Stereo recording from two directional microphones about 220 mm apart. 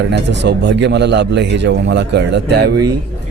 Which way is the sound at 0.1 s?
50° right (ahead or behind).